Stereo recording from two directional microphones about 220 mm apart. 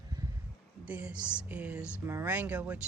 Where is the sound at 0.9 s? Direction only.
5° right (ahead or behind).